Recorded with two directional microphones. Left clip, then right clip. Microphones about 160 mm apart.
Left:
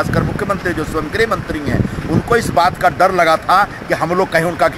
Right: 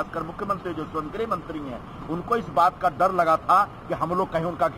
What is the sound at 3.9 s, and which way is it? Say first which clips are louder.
Speech: left 9 dB; 20° left (ahead or behind).